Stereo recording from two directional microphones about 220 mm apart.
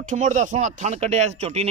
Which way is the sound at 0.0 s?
35° right (ahead or behind).